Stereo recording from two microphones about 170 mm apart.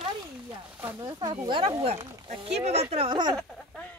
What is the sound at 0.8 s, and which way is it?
Speech, 15° right (ahead or behind).